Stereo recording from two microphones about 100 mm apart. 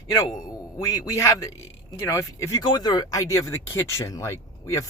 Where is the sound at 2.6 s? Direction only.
40° left (ahead or behind).